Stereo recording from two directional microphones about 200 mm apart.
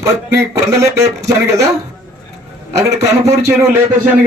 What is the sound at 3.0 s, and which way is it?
Speech, 15° right (ahead or behind).